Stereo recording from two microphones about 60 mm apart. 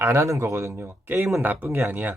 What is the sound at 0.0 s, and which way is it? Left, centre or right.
Speech, right.